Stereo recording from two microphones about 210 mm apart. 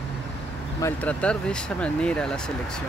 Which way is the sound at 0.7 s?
10° left (ahead or behind).